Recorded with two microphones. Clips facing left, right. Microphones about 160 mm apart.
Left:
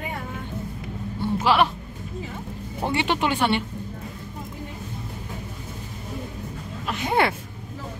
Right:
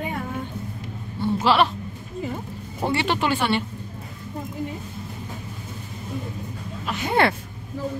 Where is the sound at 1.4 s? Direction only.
10° left (ahead or behind).